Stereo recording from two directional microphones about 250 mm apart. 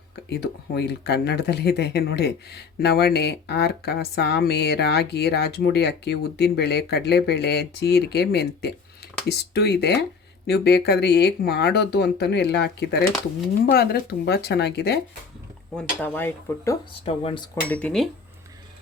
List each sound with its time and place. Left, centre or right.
0.3 s speech: left
15.7 s speech: centre
16.9 s speech: left
17.7 s speech: centre